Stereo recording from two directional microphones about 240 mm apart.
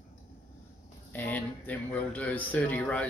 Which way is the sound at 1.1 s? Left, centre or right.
Centre.